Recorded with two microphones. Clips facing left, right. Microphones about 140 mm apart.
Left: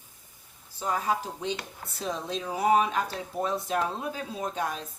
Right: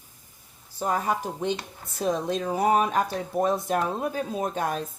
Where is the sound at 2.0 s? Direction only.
55° right (ahead or behind).